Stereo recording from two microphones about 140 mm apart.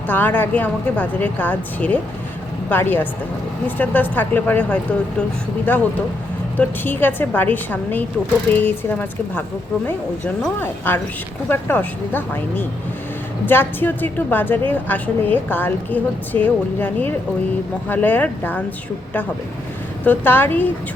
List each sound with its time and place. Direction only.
0.1 s a woman's voice: 15° left (ahead or behind)
10.6 s a woman's voice: 15° left (ahead or behind)
20.1 s a woman's voice: 15° left (ahead or behind)